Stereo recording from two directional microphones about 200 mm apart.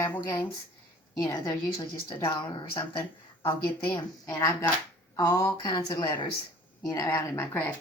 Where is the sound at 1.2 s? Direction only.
15° left (ahead or behind).